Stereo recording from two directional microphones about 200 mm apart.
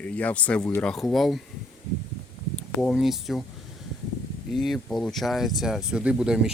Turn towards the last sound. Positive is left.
turn(degrees=-5)  # may be behind; listen again after turning